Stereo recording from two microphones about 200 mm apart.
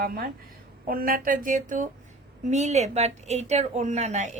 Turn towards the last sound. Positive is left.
turn(degrees=-35)  # may be behind; listen again after turning